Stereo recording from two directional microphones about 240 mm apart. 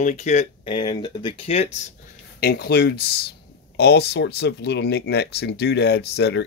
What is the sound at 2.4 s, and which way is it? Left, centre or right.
Speech, left.